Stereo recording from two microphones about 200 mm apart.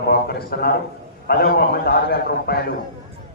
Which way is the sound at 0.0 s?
50° left (ahead or behind).